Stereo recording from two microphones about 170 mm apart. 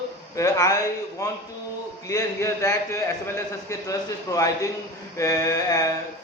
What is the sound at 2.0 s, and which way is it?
A man's voice, 15° left (ahead or behind).